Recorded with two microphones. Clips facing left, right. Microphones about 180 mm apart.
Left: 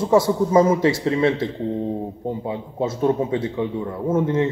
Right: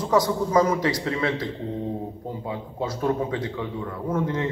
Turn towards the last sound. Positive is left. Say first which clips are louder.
# left 6 dB
turn(degrees=25)  # may be behind; listen again after turning